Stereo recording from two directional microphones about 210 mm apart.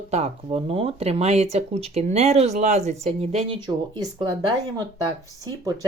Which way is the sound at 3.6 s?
20° right (ahead or behind).